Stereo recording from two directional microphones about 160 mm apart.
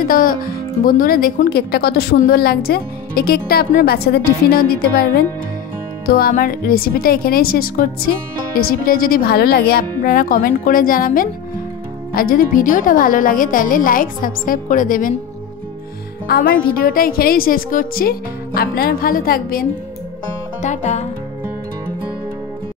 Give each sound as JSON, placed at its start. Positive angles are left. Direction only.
{"t": 0.0, "sound": "a woman's voice", "side_deg": 60}
{"t": 6.0, "sound": "a woman's voice", "side_deg": 65}
{"t": 16.3, "sound": "a woman's voice", "side_deg": 70}
{"t": 20.6, "sound": "music", "side_deg": 50}